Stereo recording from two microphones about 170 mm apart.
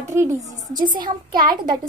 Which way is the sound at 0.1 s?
15° right (ahead or behind).